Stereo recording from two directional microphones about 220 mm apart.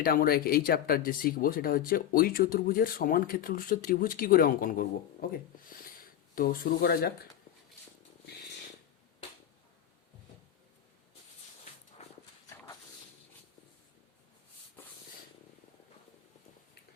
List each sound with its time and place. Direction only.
0.0 s speech: 40° left (ahead or behind)
6.3 s speech: 40° left (ahead or behind)